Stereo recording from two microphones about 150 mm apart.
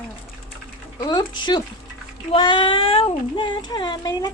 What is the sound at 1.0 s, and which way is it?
Speech, 30° left (ahead or behind).